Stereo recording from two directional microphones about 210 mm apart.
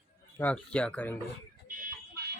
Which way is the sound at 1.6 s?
40° right (ahead or behind).